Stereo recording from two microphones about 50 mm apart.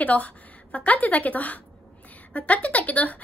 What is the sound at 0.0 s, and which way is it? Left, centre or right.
A woman's voice, left.